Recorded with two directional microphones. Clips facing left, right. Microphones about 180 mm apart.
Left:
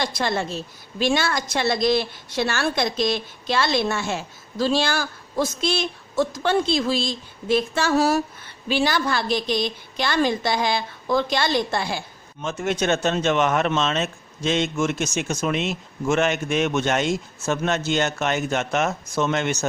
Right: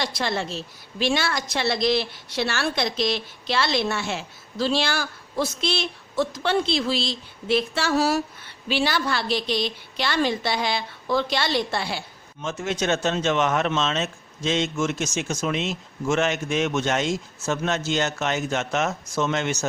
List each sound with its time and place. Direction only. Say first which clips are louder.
0.0 s a woman's voice: left 2 dB; 50° left (ahead or behind)